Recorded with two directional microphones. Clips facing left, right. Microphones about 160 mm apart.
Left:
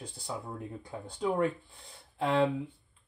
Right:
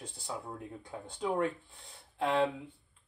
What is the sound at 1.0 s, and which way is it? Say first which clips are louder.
Speech: left 3 dB; 5° left (ahead or behind).